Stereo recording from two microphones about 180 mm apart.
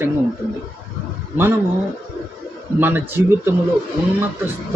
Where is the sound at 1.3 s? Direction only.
10° right (ahead or behind).